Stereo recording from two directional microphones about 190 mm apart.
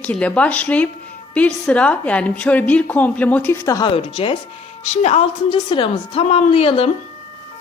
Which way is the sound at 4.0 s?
30° left (ahead or behind).